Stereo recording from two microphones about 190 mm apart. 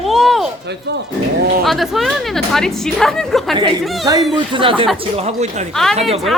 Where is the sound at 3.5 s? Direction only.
20° right (ahead or behind).